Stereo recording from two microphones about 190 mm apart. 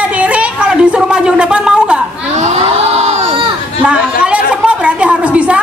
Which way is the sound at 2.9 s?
35° right (ahead or behind).